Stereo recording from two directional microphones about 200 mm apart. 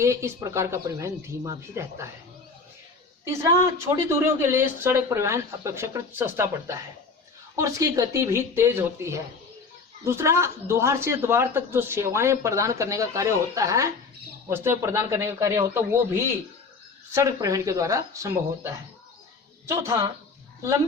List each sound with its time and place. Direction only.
0.0 s speech: 15° right (ahead or behind)
3.9 s speech: 15° right (ahead or behind)